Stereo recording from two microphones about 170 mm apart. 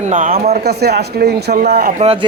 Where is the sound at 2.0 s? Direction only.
40° right (ahead or behind).